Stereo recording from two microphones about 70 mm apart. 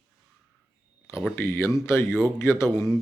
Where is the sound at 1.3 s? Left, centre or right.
Left.